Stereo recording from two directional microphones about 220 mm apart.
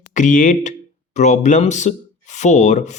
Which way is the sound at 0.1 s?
35° left (ahead or behind).